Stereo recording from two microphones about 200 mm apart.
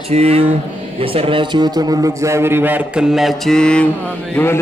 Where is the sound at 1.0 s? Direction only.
25° right (ahead or behind); by 3.9 s 5° left (ahead or behind).